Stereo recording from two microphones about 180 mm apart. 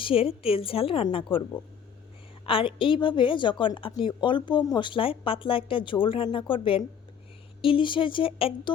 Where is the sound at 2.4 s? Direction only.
30° left (ahead or behind).